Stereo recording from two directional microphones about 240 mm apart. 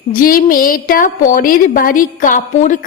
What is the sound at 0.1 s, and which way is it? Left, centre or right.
A woman's voice, left.